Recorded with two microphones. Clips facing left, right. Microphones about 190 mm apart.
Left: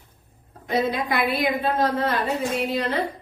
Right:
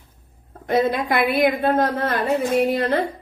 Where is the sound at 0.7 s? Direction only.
55° right (ahead or behind).